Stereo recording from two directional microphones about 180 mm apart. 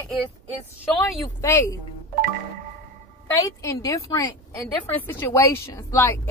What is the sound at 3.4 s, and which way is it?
A woman's voice, 20° left (ahead or behind).